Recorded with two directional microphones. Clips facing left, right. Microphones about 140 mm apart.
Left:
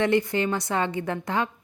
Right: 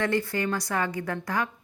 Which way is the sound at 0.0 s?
20° left (ahead or behind).